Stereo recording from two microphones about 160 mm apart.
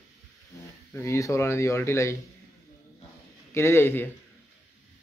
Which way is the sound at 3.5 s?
15° left (ahead or behind).